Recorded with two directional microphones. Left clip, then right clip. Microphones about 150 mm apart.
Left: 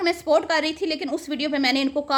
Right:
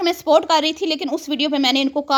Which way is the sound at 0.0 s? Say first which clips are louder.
Right 4 dB; 40° right (ahead or behind).